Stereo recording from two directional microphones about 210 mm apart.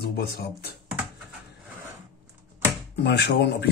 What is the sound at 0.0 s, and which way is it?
Speech, 50° left (ahead or behind).